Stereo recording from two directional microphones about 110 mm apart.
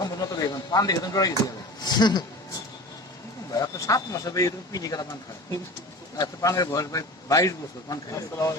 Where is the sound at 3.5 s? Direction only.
35° left (ahead or behind).